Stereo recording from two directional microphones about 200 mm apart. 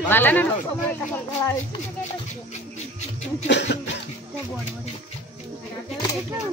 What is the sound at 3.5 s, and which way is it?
Cough, 60° left (ahead or behind).